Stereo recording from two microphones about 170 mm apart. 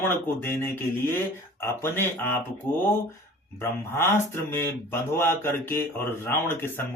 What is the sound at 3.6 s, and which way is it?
Speech, 15° left (ahead or behind).